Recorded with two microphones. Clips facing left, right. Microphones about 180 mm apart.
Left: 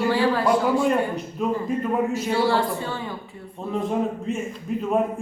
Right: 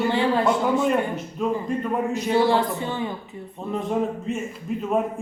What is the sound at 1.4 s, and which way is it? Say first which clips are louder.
Speech: even; centre (ahead or behind).